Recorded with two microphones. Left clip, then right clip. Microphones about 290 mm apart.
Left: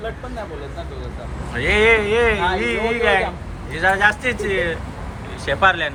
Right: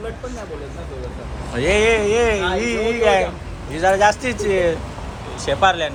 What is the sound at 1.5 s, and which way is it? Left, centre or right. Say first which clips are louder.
Speech: left 1 dB; centre.